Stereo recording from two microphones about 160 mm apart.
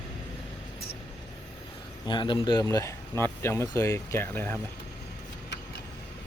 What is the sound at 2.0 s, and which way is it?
Speech, 30° left (ahead or behind).